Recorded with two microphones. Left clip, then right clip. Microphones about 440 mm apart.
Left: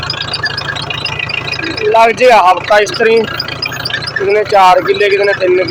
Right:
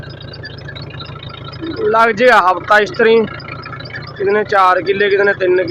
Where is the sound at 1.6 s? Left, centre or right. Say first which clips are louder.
Left 3 dB; right.